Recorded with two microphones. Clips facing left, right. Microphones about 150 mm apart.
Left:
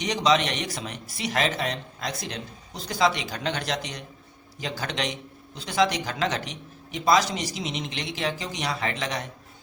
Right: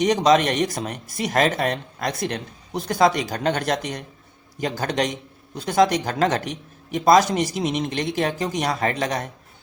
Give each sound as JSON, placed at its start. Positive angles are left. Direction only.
{"t": 0.0, "sound": "speech", "side_deg": -50}